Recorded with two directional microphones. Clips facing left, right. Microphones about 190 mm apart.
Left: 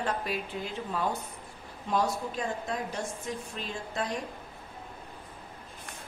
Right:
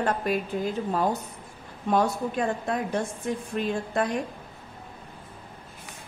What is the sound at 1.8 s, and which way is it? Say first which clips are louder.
A woman's voice: right 5 dB; 55° right (ahead or behind).